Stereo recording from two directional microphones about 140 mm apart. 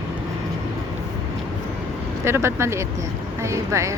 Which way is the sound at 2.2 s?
20° right (ahead or behind).